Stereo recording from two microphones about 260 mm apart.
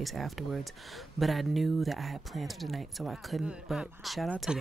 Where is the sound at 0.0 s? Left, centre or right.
Centre.